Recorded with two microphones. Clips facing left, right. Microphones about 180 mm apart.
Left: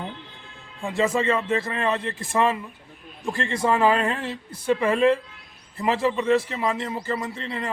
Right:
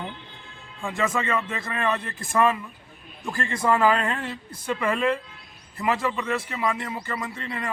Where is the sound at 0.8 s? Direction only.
30° left (ahead or behind).